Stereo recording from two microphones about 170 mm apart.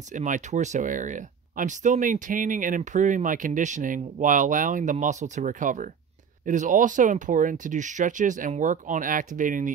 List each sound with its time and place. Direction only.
0.1 s speech: 45° right (ahead or behind)